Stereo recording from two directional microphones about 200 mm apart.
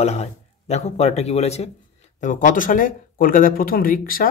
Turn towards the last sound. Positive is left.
turn(degrees=45)  # may be behind; listen again after turning